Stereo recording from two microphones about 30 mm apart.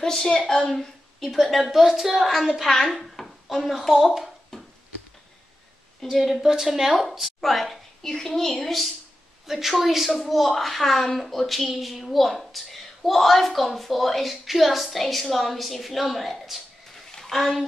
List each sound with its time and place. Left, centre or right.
0.0 s a woman's voice: centre
0.7 s a woman's voice: centre
6.1 s a woman's voice: centre
6.5 s a woman's voice: centre
7.3 s a woman's voice: centre
8.0 s a woman's voice: centre
9.5 s a woman's voice: centre
17.1 s a sound: centre